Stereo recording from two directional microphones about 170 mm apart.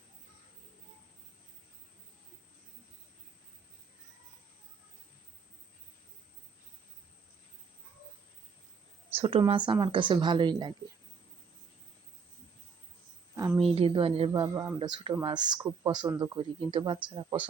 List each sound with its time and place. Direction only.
9.1 s speech: 35° right (ahead or behind)
13.6 s speech: 35° right (ahead or behind)